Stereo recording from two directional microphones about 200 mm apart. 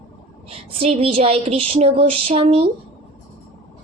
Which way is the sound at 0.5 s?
30° right (ahead or behind).